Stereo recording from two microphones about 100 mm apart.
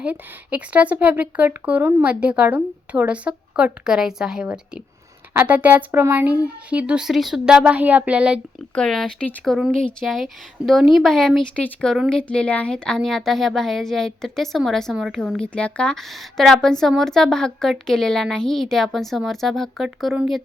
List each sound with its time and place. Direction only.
0.0 s a woman's voice: 15° right (ahead or behind)
8.7 s a woman's voice: 5° left (ahead or behind)
9.7 s speech: 10° left (ahead or behind)
10.7 s a woman's voice: centre (ahead or behind)